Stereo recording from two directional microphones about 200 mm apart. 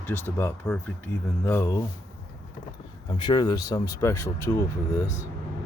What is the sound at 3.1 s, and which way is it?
Speech, 20° left (ahead or behind).